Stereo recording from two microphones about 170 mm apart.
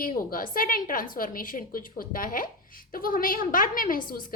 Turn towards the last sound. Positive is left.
turn(degrees=55)  # may be behind; listen again after turning